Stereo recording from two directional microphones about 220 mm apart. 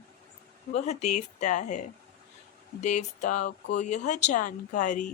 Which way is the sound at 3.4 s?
50° left (ahead or behind).